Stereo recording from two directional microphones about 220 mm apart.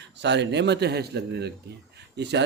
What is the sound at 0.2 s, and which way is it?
Speech, 55° right (ahead or behind).